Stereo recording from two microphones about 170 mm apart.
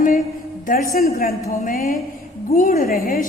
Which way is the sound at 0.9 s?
60° left (ahead or behind).